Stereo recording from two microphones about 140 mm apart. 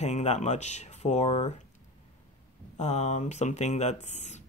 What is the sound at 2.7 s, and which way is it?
Speech, 55° left (ahead or behind).